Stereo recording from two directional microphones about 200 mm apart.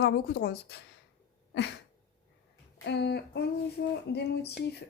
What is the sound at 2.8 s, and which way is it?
A woman's voice, 55° left (ahead or behind).